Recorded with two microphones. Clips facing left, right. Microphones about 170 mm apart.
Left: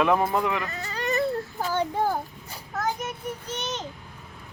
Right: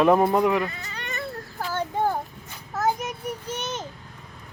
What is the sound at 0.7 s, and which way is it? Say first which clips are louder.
Baby cry: left 8 dB; 40° left (ahead or behind).